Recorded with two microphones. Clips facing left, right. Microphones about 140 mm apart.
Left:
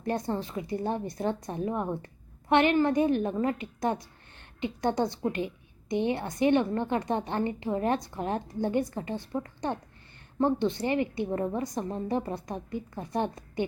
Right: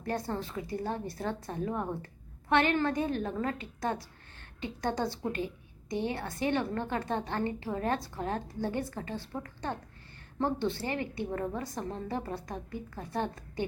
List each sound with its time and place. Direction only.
0.0 s a woman's voice: 20° left (ahead or behind)